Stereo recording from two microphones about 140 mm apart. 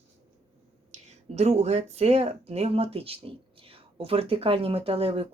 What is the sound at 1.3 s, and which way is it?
Speech, 50° right (ahead or behind).